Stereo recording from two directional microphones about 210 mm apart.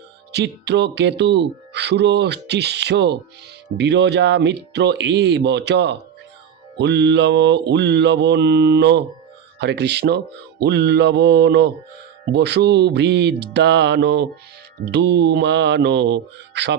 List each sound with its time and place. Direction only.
0.3 s speech: 55° right (ahead or behind)
3.8 s mantra: 55° right (ahead or behind)
9.6 s speech: 55° right (ahead or behind)
14.8 s mantra: 55° right (ahead or behind)